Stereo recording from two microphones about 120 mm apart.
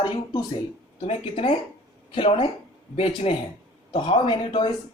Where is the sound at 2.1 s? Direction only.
50° left (ahead or behind).